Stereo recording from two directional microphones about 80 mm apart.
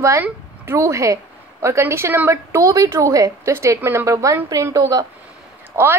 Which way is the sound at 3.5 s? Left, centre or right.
Right.